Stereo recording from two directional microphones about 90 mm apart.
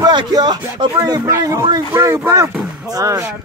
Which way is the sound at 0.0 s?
50° right (ahead or behind).